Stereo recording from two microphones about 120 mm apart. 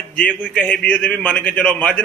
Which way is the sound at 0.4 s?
10° left (ahead or behind).